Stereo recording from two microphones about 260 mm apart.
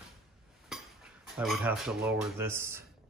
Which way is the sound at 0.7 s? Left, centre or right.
Centre.